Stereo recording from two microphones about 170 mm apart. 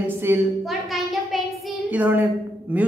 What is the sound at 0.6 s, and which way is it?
Child singing, centre (ahead or behind).